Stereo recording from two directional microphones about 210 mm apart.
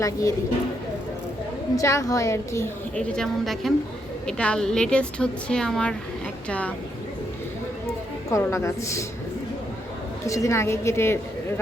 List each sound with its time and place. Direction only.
0.0 s a woman's voice: 15° left (ahead or behind)
1.7 s a woman's voice: 15° left (ahead or behind)
8.3 s a woman's voice: 15° left (ahead or behind)
10.2 s a woman's voice: 15° left (ahead or behind)